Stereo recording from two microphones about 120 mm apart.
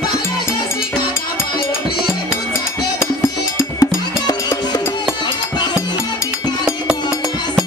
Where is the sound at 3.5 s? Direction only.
30° left (ahead or behind).